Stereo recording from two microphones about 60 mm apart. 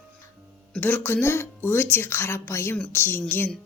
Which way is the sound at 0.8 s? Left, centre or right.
Left.